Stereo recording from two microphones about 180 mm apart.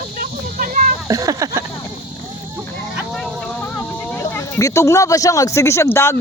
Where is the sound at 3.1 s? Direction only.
Centre (ahead or behind).